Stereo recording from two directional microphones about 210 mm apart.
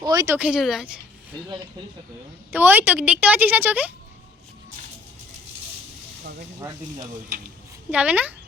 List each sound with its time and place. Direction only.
0.0 s a sound: 20° right (ahead or behind)
0.3 s speech: 5° right (ahead or behind)
2.5 s a woman's voice: 10° right (ahead or behind)
7.9 s a woman's voice: 5° right (ahead or behind)